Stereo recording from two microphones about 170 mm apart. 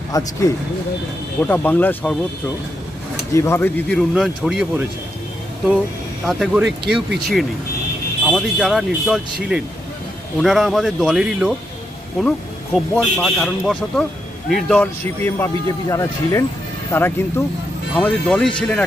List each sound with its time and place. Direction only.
0.1 s speech: 20° left (ahead or behind)
3.3 s speech: 15° left (ahead or behind); by 4.9 s centre (ahead or behind)
6.2 s speech: centre (ahead or behind)
12.7 s speech: 5° left (ahead or behind)